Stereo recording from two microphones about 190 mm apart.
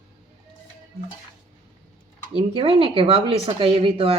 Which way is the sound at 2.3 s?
30° right (ahead or behind).